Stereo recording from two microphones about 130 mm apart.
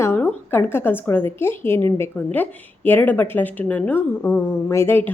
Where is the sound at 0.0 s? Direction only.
15° left (ahead or behind).